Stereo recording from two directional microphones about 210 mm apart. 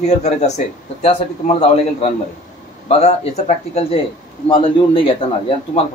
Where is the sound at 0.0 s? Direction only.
30° left (ahead or behind).